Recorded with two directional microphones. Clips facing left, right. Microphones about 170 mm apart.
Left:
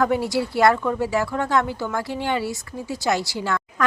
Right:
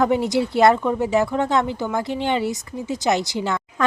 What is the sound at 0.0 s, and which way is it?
Speech, 20° right (ahead or behind).